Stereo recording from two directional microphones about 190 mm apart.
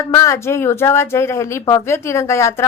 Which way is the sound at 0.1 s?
15° left (ahead or behind).